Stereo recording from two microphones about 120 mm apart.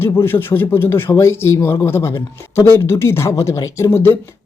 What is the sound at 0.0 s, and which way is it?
Speech, 20° left (ahead or behind).